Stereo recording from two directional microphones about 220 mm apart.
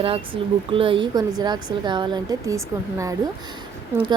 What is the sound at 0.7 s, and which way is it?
A woman's voice, 25° right (ahead or behind).